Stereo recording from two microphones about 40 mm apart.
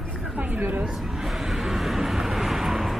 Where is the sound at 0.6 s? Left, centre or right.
Right.